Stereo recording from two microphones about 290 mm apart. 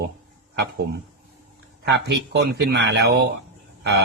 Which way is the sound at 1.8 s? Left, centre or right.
Right.